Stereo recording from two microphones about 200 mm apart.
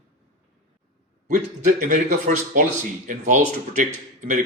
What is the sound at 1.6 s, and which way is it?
A man's voice, 40° right (ahead or behind).